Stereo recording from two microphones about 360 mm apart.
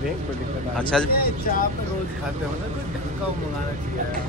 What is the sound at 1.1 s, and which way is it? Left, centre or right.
Speech, left.